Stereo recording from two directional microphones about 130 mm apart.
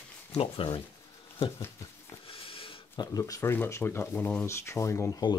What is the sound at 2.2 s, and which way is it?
Speech, 45° left (ahead or behind).